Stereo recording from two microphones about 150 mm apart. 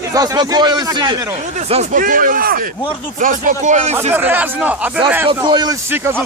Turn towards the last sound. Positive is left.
turn(degrees=-30)  # may be behind; listen again after turning